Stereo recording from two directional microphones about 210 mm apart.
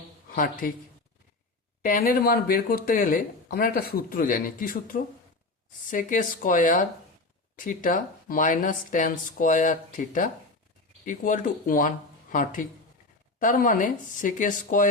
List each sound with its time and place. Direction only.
0.3 s speech: 40° left (ahead or behind)
1.8 s speech: 40° left (ahead or behind)